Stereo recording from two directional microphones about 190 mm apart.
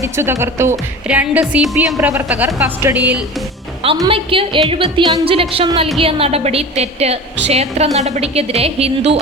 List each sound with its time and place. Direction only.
0.0 s speech: 15° right (ahead or behind)
4.0 s a woman's voice: 30° right (ahead or behind)